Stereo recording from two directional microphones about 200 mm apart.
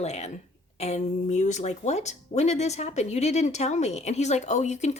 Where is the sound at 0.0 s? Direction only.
35° left (ahead or behind).